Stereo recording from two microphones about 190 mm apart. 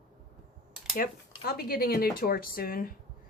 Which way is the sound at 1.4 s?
50° left (ahead or behind).